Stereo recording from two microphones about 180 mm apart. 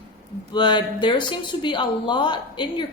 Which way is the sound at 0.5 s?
25° left (ahead or behind).